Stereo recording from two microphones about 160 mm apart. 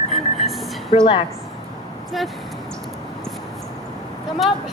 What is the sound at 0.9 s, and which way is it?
Speech, 30° left (ahead or behind).